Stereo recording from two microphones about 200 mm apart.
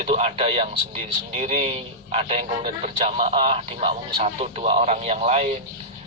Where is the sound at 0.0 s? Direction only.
30° right (ahead or behind).